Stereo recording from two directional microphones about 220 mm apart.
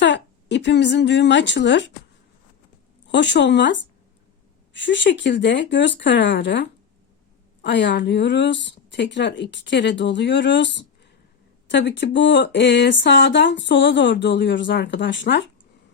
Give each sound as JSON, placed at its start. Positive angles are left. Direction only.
{"t": 0.0, "sound": "a woman's voice", "side_deg": 55}
{"t": 3.1, "sound": "speech", "side_deg": 50}